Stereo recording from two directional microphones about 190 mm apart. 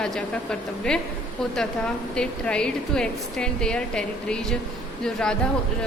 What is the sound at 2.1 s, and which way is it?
A woman's voice, 5° left (ahead or behind).